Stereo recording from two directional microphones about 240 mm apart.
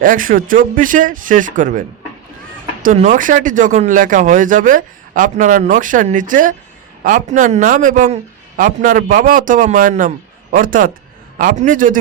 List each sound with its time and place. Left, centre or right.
0.0 s speech: right
2.8 s speech: right